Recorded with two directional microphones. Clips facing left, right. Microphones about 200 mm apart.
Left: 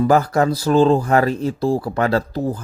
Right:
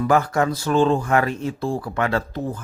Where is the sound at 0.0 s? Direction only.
35° left (ahead or behind).